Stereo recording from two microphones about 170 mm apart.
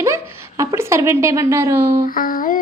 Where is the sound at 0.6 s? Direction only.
20° right (ahead or behind).